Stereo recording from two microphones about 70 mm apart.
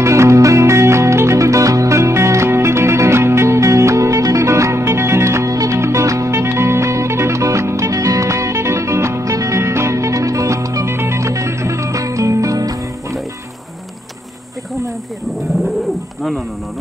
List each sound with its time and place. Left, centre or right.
0.0 s music: right
10.9 s music: right